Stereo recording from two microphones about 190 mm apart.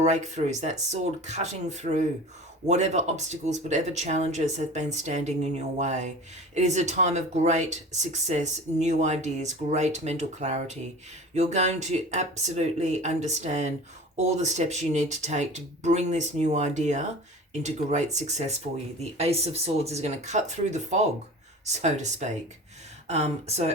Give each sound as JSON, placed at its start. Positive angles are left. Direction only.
{"t": 0.0, "sound": "speech", "side_deg": -35}